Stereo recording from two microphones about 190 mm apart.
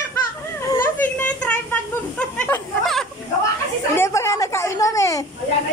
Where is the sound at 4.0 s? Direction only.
15° left (ahead or behind).